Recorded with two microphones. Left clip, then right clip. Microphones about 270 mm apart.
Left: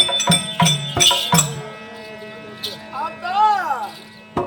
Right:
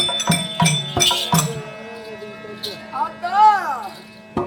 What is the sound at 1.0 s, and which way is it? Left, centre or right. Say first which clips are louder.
Music: left 4 dB; centre.